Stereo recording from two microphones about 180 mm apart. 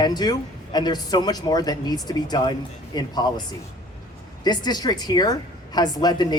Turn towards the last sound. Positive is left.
turn(degrees=25)  # may be behind; listen again after turning